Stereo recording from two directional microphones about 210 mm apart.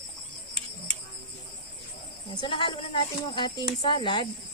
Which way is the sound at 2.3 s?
25° left (ahead or behind).